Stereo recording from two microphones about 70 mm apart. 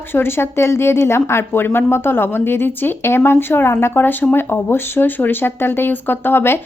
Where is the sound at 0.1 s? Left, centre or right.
Left.